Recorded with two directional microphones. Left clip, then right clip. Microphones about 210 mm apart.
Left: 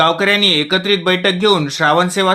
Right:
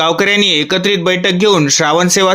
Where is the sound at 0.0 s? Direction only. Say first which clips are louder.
Right 1 dB; 40° right (ahead or behind).